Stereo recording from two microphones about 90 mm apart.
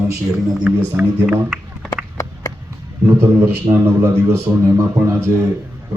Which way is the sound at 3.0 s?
30° right (ahead or behind).